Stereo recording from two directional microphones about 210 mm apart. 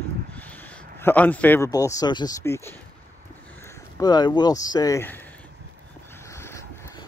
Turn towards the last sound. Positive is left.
turn(degrees=15)  # may be behind; listen again after turning